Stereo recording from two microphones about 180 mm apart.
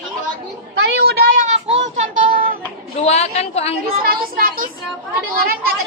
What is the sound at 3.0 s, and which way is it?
Speech, 35° left (ahead or behind).